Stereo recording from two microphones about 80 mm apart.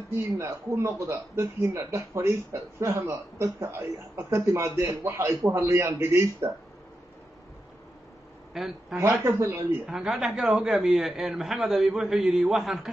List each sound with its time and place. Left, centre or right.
0.1 s speech: right
4.2 s speech: right
4.5 s speech: right
8.5 s a man's voice: centre